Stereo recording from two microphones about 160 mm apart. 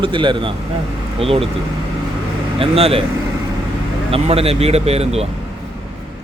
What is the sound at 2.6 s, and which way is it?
Speech, 35° right (ahead or behind).